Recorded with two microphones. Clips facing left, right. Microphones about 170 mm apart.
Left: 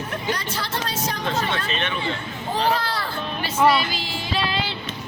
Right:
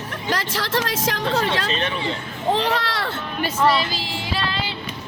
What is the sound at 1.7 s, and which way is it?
Speech, 35° right (ahead or behind).